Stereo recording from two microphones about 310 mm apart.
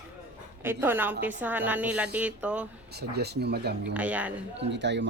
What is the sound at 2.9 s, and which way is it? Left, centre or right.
Speech, right.